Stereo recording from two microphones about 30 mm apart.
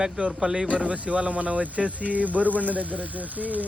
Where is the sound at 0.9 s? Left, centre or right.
Right.